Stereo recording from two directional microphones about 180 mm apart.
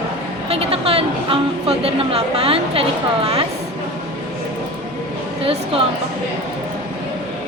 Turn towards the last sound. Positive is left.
turn(degrees=-35)  # may be behind; listen again after turning